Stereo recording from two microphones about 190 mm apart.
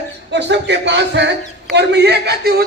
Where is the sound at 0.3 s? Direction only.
65° right (ahead or behind).